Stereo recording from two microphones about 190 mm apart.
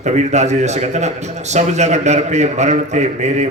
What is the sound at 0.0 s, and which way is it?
A man's voice, 35° right (ahead or behind).